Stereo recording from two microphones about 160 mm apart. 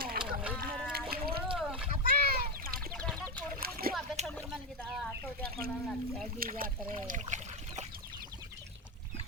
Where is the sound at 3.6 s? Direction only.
65° right (ahead or behind).